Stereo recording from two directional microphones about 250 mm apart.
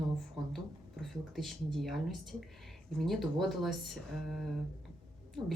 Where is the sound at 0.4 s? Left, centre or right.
Centre.